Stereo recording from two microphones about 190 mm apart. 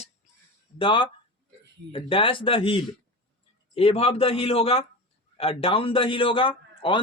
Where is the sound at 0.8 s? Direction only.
25° left (ahead or behind).